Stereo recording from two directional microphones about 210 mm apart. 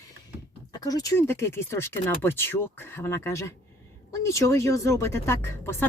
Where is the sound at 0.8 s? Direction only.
15° left (ahead or behind).